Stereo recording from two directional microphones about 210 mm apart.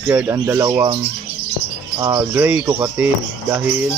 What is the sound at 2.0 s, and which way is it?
Speech, 15° right (ahead or behind).